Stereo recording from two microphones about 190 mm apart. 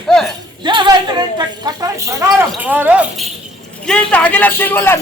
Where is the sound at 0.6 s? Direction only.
25° right (ahead or behind).